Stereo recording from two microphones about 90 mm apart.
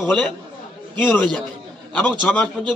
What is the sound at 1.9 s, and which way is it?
Speech, 15° left (ahead or behind).